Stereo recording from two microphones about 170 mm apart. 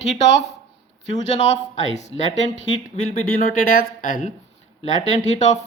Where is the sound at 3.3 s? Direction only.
55° left (ahead or behind).